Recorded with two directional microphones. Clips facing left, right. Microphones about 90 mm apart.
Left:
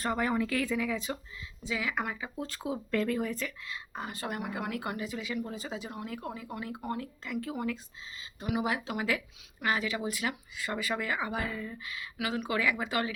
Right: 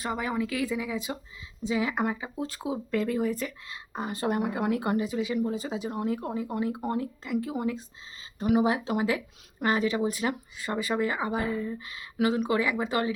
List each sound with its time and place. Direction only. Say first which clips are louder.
0.0 s speech: even; 10° right (ahead or behind)
1.6 s speech: right 6 dB; 30° right (ahead or behind); by 3.4 s 15° right (ahead or behind)
3.4 s speech: right 3 dB; 25° right (ahead or behind)
8.6 s speech: right 6 dB; 30° right (ahead or behind)